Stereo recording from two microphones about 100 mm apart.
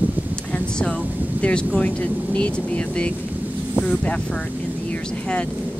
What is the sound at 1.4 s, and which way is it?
Speech, 10° left (ahead or behind).